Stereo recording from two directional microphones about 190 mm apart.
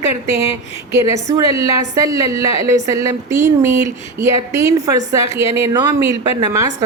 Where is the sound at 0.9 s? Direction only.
15° right (ahead or behind).